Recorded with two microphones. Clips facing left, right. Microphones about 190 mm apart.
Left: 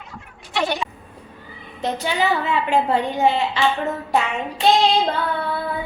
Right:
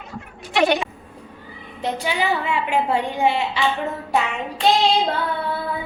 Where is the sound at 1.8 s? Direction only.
10° right (ahead or behind).